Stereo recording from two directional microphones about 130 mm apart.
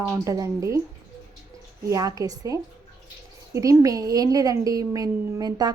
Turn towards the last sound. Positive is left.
turn(degrees=-30)  # may be behind; listen again after turning